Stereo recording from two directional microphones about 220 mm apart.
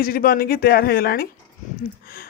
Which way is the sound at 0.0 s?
40° left (ahead or behind).